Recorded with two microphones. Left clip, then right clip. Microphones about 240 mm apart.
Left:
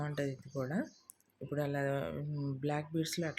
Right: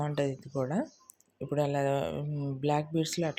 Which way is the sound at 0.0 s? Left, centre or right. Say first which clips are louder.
Right 7 dB; centre.